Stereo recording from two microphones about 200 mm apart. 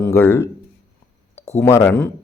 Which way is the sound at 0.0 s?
10° left (ahead or behind).